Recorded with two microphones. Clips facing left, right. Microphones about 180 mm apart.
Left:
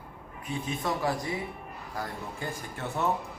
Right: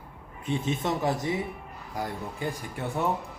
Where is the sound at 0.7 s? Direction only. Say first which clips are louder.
Right 2 dB; 25° right (ahead or behind).